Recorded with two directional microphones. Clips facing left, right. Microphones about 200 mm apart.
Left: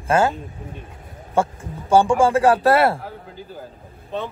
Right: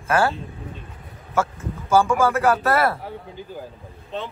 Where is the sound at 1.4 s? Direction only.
30° left (ahead or behind).